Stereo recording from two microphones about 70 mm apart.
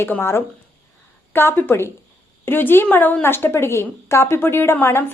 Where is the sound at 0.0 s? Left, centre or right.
Left.